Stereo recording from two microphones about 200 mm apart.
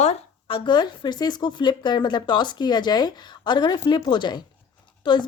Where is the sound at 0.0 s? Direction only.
30° left (ahead or behind).